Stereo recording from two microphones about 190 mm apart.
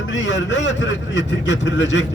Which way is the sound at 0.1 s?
75° left (ahead or behind).